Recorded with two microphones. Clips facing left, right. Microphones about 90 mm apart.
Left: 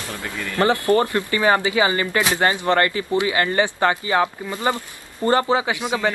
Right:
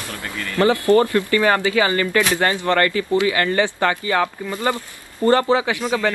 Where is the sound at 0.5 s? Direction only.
20° left (ahead or behind).